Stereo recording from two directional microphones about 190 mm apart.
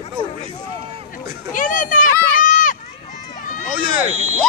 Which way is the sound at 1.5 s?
45° left (ahead or behind).